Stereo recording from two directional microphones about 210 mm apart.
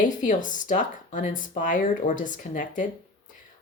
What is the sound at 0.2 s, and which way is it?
Speech, 35° left (ahead or behind).